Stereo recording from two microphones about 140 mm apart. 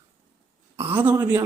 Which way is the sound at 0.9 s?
15° right (ahead or behind).